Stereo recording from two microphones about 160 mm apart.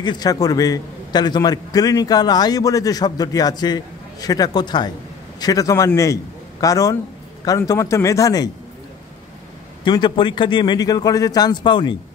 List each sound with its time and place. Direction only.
0.0 s a man's voice: 25° left (ahead or behind)
9.8 s a man's voice: 30° left (ahead or behind)